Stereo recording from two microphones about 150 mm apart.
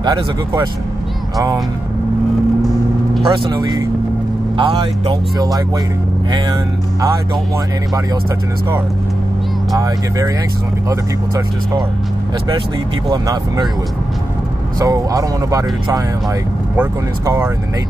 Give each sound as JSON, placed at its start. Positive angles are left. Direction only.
{"t": 0.0, "sound": "speech", "side_deg": -30}
{"t": 3.3, "sound": "speech", "side_deg": -25}
{"t": 9.8, "sound": "speech", "side_deg": -20}
{"t": 13.1, "sound": "speech", "side_deg": -30}
{"t": 14.8, "sound": "speech", "side_deg": -25}